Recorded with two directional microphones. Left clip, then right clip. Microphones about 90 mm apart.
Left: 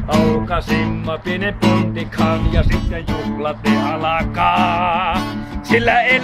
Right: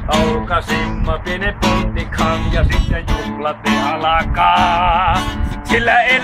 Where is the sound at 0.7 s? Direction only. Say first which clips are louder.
Right 1 dB; 55° left (ahead or behind).